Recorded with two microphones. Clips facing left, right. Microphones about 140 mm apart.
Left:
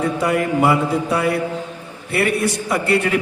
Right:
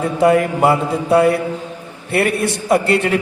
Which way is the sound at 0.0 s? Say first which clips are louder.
Right 5 dB; 25° right (ahead or behind).